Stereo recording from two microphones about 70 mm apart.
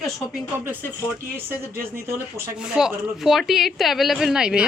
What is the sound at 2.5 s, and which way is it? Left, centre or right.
A woman's voice, centre.